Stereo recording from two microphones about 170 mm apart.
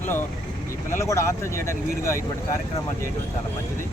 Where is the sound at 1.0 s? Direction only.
15° left (ahead or behind).